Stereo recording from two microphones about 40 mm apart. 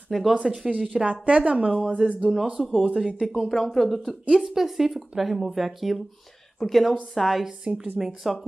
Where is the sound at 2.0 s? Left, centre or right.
Centre.